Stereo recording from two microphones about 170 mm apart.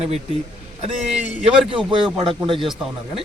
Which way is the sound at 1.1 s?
5° right (ahead or behind).